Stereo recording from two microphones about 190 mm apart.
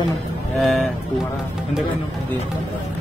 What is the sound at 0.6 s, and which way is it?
Speech, centre (ahead or behind).